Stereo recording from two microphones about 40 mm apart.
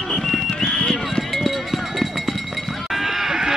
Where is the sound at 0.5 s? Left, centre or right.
Centre.